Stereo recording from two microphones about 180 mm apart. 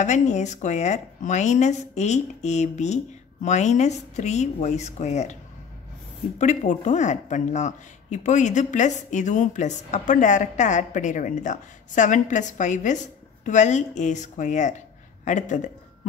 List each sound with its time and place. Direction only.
0.0 s speech: 40° left (ahead or behind)